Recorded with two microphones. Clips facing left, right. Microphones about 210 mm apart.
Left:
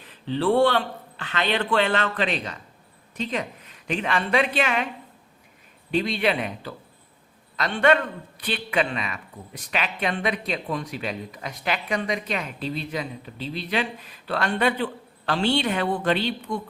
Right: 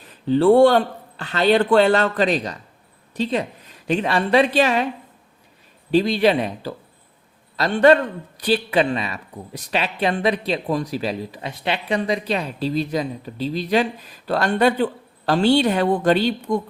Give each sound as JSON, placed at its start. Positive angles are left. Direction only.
{"t": 0.1, "sound": "a woman's voice", "side_deg": -45}
{"t": 5.9, "sound": "a woman's voice", "side_deg": -35}